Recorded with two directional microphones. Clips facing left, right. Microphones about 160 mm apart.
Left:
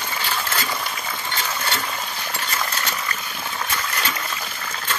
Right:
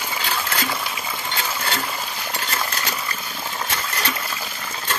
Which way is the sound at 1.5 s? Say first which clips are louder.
Even; 5° right (ahead or behind).